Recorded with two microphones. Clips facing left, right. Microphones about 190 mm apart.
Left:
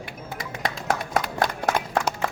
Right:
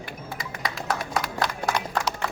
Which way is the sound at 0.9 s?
50° left (ahead or behind).